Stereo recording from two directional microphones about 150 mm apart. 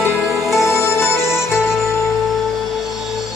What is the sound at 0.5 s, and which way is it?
Music, 20° left (ahead or behind).